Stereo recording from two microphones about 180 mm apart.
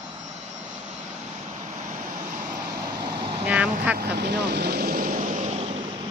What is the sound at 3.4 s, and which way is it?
Speech, 10° right (ahead or behind).